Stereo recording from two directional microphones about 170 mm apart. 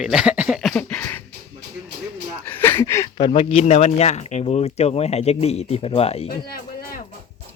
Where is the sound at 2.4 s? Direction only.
10° left (ahead or behind).